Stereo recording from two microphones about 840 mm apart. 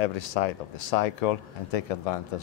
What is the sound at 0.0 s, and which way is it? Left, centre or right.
Speech, left.